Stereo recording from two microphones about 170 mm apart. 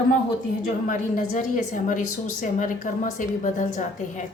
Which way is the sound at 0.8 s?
50° left (ahead or behind).